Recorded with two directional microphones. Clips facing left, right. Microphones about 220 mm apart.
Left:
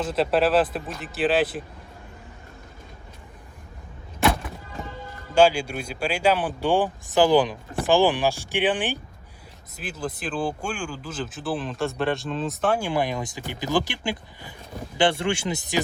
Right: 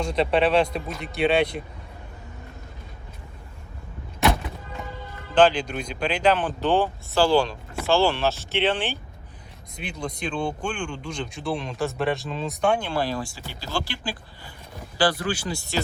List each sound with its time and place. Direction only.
0.0 s speech: 5° left (ahead or behind)
5.3 s speech: 10° left (ahead or behind)
9.7 s speech: 5° left (ahead or behind)
12.9 s speech: 15° left (ahead or behind)